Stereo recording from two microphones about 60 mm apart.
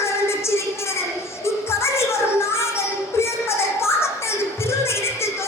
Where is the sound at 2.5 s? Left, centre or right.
Left.